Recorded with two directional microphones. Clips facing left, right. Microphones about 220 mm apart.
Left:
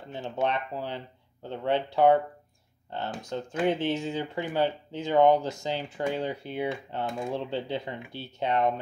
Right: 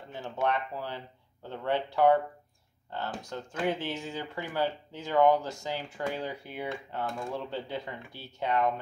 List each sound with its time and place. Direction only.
0.1 s speech: 20° left (ahead or behind)